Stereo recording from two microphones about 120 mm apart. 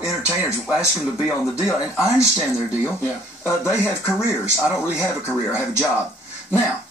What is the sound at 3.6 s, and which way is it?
Speech, 20° left (ahead or behind).